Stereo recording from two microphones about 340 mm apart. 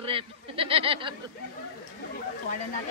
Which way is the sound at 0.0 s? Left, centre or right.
Centre.